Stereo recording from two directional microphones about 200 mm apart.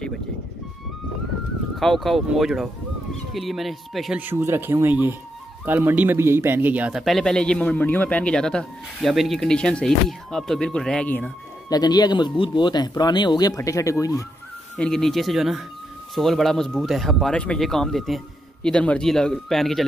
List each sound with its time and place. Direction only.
1.8 s speech: centre (ahead or behind)
11.7 s speech: 20° left (ahead or behind)
14.8 s speech: centre (ahead or behind)